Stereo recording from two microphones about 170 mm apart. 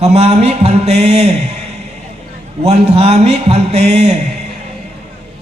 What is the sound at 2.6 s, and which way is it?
Speech, 40° right (ahead or behind).